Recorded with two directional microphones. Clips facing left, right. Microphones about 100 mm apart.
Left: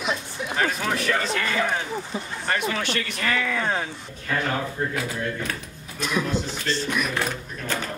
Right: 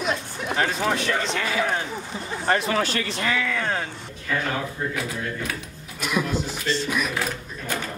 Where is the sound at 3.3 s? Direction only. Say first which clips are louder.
Left 2 dB; centre (ahead or behind).